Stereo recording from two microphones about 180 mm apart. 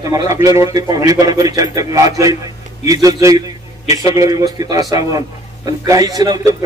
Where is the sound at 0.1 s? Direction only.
20° right (ahead or behind).